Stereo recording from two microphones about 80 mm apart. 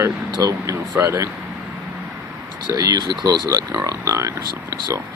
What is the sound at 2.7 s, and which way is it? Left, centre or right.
Speech, right.